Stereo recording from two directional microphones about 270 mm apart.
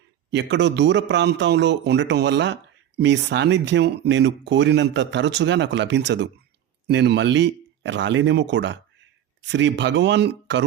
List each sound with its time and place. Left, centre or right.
0.3 s a man's voice: right